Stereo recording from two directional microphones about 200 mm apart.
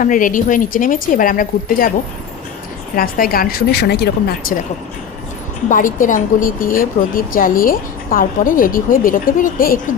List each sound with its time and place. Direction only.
0.0 s a woman's voice: 40° left (ahead or behind)
2.9 s a woman's voice: 45° left (ahead or behind)
5.6 s a woman's voice: 40° left (ahead or behind)